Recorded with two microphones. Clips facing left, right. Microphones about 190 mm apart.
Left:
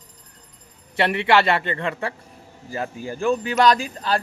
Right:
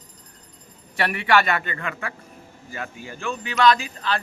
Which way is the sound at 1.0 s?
25° left (ahead or behind).